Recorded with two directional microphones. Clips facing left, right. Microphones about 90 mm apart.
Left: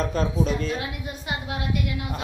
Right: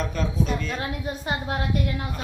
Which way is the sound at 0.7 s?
40° right (ahead or behind).